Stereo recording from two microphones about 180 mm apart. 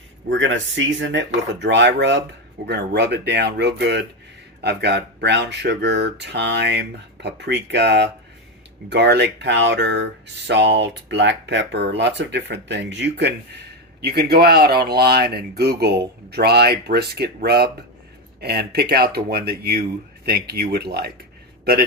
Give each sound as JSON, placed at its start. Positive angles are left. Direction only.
{"t": 0.3, "sound": "speech", "side_deg": -90}
{"t": 14.0, "sound": "a man's voice", "side_deg": -60}